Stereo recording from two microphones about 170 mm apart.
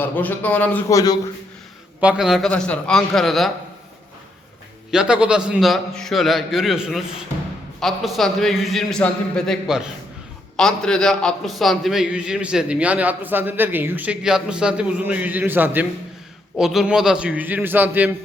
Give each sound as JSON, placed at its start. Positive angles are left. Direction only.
{"t": 0.0, "sound": "a man's voice", "side_deg": 10}
{"t": 0.9, "sound": "a man's voice", "side_deg": 20}
{"t": 2.0, "sound": "a man's voice", "side_deg": -5}
{"t": 4.9, "sound": "a man's voice", "side_deg": -5}